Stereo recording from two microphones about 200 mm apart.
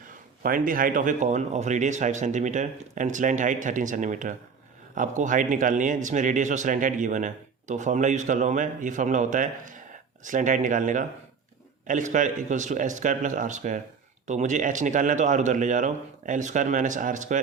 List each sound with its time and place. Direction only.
0.4 s speech: 45° right (ahead or behind)